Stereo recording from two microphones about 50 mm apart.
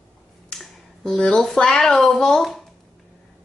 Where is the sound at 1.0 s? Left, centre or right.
Centre.